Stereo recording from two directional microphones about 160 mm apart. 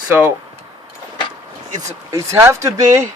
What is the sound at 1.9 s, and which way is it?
Speech, 20° right (ahead or behind).